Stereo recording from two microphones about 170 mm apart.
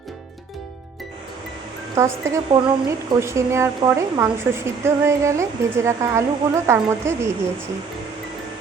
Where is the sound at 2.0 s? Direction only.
20° right (ahead or behind).